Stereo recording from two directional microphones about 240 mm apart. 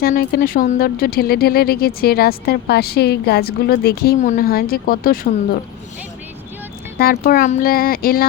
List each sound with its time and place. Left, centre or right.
0.0 s speech: left
7.0 s speech: left